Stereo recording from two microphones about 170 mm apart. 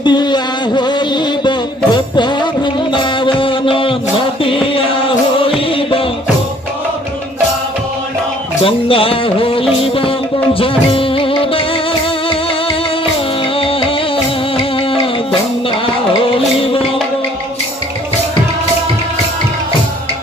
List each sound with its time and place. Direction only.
0.0 s music: 25° left (ahead or behind)
8.6 s music: 30° left (ahead or behind)
13.6 s music: 30° left (ahead or behind)